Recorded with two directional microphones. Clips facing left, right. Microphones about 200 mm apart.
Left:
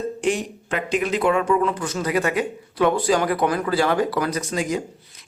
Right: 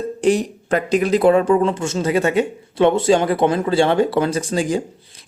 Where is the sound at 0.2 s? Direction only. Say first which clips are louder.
Right 10 dB; 35° right (ahead or behind).